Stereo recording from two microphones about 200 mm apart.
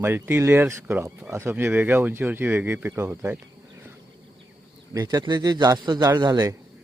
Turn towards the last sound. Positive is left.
turn(degrees=-20)  # may be behind; listen again after turning